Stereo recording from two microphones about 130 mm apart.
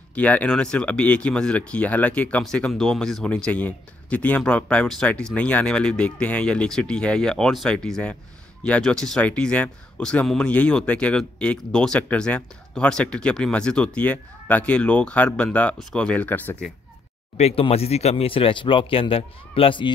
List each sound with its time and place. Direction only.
0.1 s speech: 10° left (ahead or behind)
17.4 s speech: 55° left (ahead or behind)